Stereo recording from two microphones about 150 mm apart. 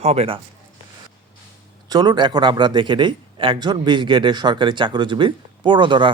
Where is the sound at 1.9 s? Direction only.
25° right (ahead or behind).